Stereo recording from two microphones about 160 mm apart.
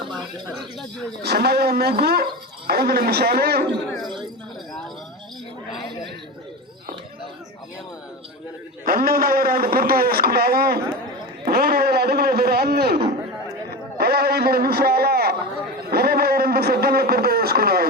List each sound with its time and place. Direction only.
1.2 s speech: 90° right
8.8 s a man's voice: 65° right (ahead or behind)
15.9 s a sound: 75° right (ahead or behind)